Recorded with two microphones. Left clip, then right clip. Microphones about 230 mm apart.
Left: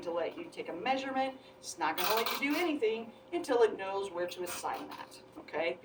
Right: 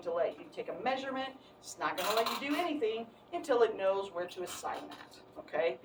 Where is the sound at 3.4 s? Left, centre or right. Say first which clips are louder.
Even; centre.